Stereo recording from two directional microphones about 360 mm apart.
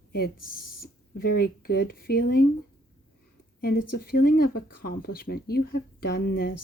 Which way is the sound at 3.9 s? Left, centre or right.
Left.